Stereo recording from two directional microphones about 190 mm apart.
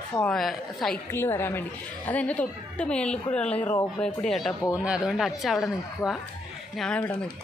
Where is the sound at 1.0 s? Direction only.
10° left (ahead or behind).